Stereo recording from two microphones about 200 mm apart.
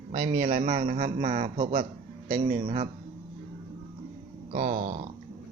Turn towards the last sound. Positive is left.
turn(degrees=-40)  # may be behind; listen again after turning